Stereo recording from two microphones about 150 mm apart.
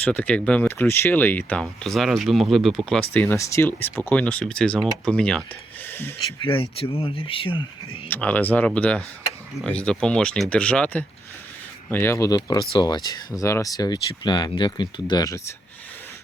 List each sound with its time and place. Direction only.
0.0 s speech: 10° left (ahead or behind)
5.8 s a sound: 15° left (ahead or behind)
6.4 s speech: 35° left (ahead or behind)
8.1 s speech: 10° left (ahead or behind)